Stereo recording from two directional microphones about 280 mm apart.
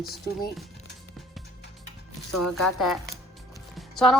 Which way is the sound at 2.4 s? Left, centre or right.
Centre.